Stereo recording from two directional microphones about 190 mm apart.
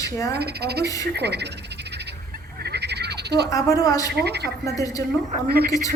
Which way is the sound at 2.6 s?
60° right (ahead or behind).